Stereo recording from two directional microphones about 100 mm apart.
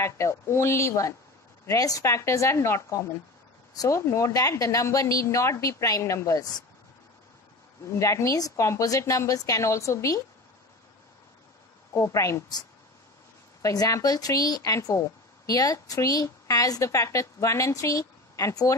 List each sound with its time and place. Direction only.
0.0 s a woman's voice: 30° left (ahead or behind)
7.9 s a woman's voice: 30° left (ahead or behind)
11.9 s a woman's voice: 30° left (ahead or behind)
13.6 s a woman's voice: 35° left (ahead or behind)